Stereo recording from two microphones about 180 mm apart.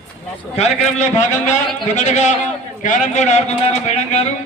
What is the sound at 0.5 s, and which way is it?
A man's voice, 40° left (ahead or behind).